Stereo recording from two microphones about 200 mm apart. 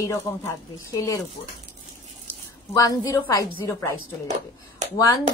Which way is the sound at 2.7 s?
15° left (ahead or behind).